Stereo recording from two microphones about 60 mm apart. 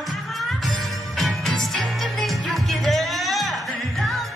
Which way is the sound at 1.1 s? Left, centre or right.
Centre.